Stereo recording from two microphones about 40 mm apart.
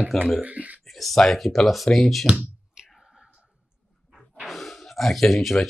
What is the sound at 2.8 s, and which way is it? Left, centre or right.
Whispering, centre.